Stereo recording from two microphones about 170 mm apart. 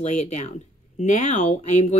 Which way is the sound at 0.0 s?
45° left (ahead or behind).